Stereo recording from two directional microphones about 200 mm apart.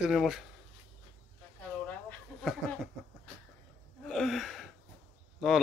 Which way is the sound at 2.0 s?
Centre (ahead or behind).